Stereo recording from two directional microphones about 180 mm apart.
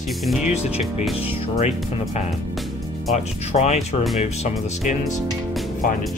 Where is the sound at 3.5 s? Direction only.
40° left (ahead or behind).